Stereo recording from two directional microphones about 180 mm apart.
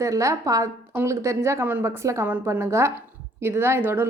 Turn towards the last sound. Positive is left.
turn(degrees=-15)  # may be behind; listen again after turning